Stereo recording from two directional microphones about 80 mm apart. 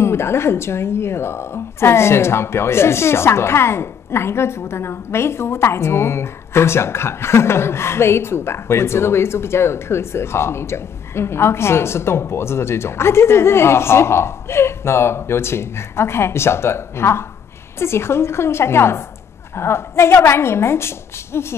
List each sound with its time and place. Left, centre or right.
0.0 s a woman's voice: left